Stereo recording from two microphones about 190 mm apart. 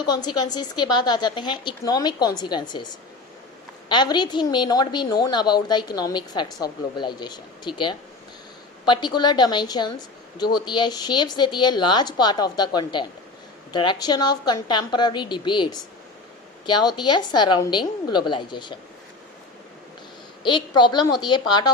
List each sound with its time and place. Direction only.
0.0 s a woman's voice: 20° left (ahead or behind)
3.8 s a woman's voice: 25° left (ahead or behind)
20.4 s a woman's voice: 25° left (ahead or behind)